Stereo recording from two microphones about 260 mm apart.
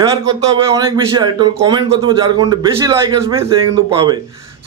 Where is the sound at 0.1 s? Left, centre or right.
Centre.